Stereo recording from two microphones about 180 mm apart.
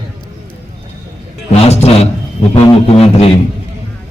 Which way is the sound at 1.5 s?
35° left (ahead or behind).